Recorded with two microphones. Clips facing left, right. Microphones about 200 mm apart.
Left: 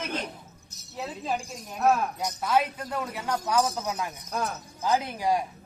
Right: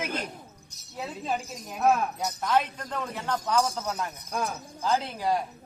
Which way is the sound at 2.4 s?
10° left (ahead or behind).